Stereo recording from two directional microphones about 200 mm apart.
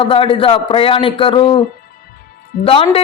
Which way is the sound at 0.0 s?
25° left (ahead or behind).